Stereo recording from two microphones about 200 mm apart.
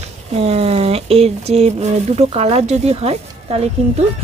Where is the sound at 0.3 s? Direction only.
30° right (ahead or behind).